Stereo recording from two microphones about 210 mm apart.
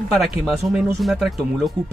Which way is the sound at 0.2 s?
Centre (ahead or behind).